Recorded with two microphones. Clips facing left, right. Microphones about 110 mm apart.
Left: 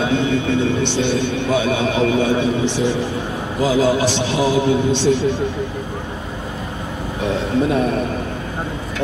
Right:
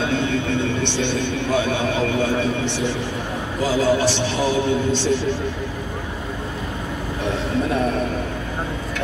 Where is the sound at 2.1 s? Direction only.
15° left (ahead or behind).